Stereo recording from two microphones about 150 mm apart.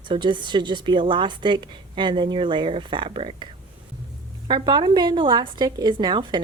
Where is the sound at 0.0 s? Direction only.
30° right (ahead or behind).